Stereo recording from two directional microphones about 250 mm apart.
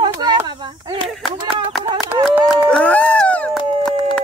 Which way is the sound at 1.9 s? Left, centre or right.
Centre.